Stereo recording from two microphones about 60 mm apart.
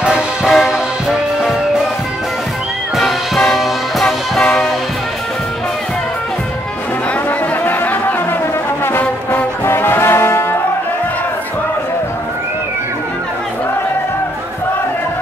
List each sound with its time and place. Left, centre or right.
0.0 s music: centre
0.5 s music: centre
3.0 s music: centre
7.2 s music: left